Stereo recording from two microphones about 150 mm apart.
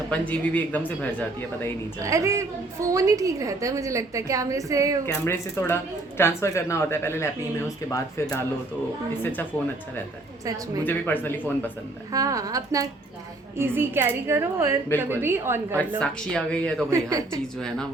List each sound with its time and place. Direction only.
0.1 s speech: 10° left (ahead or behind)
2.0 s a woman's voice: 20° right (ahead or behind)
5.0 s speech: 15° left (ahead or behind)
10.8 s speech: 10° left (ahead or behind)
12.1 s a woman's voice: 25° right (ahead or behind)
16.0 s speech: 5° left (ahead or behind)
16.9 s a woman's voice: 20° right (ahead or behind)
17.4 s speech: 5° left (ahead or behind)